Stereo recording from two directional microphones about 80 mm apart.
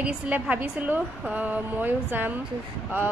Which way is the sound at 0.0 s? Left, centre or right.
Centre.